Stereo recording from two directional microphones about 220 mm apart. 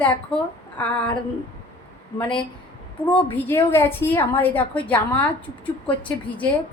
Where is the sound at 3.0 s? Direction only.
25° left (ahead or behind).